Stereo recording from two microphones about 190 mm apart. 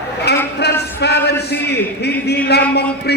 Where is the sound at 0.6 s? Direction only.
60° left (ahead or behind).